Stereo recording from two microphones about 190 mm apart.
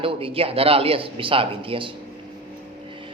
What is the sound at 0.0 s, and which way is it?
A woman's voice, 30° right (ahead or behind).